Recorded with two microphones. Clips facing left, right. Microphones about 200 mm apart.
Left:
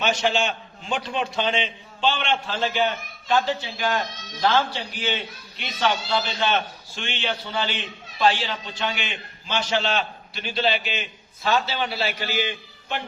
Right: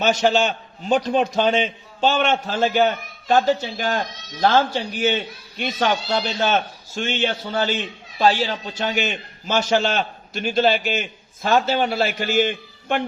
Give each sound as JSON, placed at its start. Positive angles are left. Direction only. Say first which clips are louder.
{"t": 0.0, "sound": "a man's voice", "louder": "right 5 dB", "side_deg": -40}